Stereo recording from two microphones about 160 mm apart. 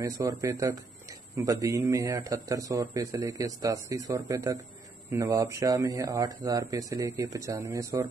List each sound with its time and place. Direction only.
0.0 s a man's voice: 20° right (ahead or behind)